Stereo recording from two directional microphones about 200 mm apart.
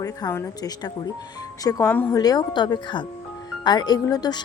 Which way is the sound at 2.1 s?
20° left (ahead or behind).